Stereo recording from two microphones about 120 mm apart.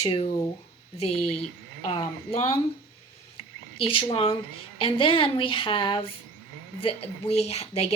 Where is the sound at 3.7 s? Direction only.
50° left (ahead or behind).